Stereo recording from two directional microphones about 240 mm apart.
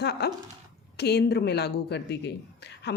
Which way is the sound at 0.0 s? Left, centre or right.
Left.